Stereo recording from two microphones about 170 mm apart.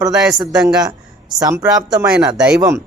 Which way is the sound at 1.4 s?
20° right (ahead or behind).